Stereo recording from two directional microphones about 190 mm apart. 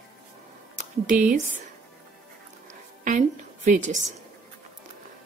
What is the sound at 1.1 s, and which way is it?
Speech, 45° right (ahead or behind).